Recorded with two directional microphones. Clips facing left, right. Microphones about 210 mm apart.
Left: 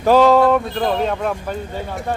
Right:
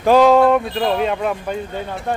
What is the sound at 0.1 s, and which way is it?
Speech, 10° right (ahead or behind).